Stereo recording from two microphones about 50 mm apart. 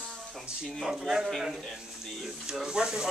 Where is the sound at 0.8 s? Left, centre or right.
Centre.